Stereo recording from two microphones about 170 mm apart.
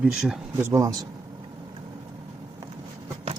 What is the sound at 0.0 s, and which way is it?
Speech, 5° right (ahead or behind).